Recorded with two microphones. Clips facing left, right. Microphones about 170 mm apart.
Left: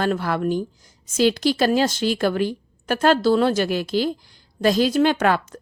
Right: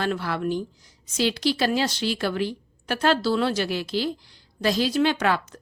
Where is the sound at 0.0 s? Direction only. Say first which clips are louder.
Left 4 dB; 45° left (ahead or behind).